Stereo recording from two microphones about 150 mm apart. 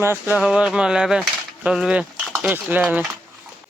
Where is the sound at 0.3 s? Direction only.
5° right (ahead or behind).